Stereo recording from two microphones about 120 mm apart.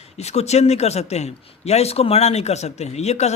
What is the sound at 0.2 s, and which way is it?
A man's voice, 65° left (ahead or behind).